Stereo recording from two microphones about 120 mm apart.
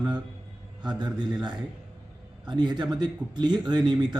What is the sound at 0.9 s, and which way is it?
A man's voice, 35° right (ahead or behind).